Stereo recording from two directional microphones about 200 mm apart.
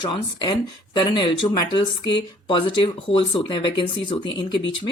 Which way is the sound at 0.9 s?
25° left (ahead or behind).